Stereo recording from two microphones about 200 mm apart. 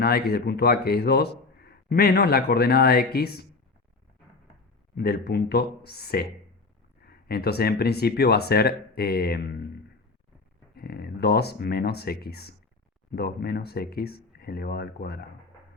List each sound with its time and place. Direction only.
0.0 s speech: 50° left (ahead or behind)
4.9 s speech: 50° left (ahead or behind)
10.8 s speech: 50° left (ahead or behind)